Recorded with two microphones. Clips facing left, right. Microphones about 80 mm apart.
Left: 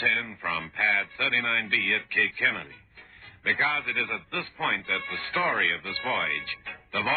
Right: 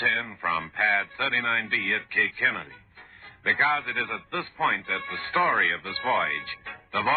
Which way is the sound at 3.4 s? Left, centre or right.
Right.